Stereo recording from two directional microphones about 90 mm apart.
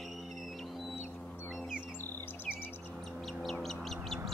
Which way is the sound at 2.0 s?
25° left (ahead or behind).